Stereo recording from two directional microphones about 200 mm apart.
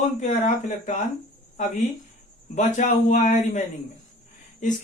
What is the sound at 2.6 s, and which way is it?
Speech, 40° left (ahead or behind).